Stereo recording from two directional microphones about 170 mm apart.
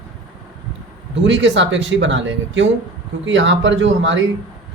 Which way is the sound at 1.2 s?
90° right.